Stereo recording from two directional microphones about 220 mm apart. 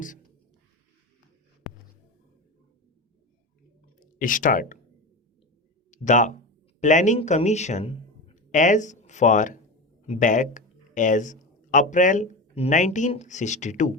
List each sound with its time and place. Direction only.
4.0 s speech: 35° left (ahead or behind)
5.9 s speech: 35° left (ahead or behind)